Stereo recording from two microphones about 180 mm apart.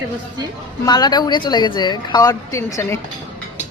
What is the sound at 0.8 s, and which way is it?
A woman's voice, 25° left (ahead or behind).